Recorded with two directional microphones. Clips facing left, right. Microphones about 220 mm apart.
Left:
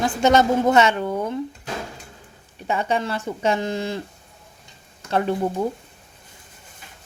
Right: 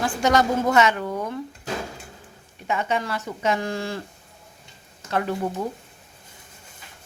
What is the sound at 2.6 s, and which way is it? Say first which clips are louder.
Speech: left 2 dB; 35° left (ahead or behind).